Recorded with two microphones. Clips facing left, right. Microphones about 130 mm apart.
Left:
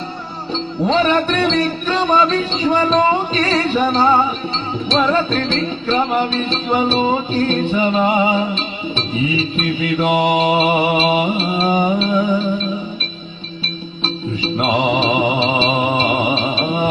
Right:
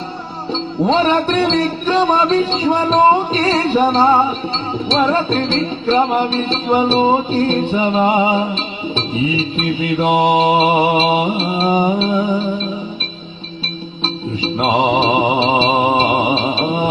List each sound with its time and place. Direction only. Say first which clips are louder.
0.9 s music: right 1 dB; 25° right (ahead or behind)
14.0 s music: right 1 dB; 30° right (ahead or behind)